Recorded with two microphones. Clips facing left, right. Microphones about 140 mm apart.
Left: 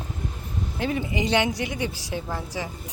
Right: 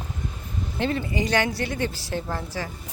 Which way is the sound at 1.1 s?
20° left (ahead or behind).